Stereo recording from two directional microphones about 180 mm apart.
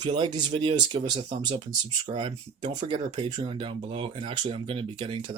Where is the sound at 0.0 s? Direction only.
25° right (ahead or behind).